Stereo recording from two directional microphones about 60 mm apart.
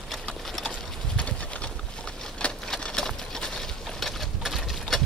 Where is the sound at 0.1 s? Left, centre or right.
Centre.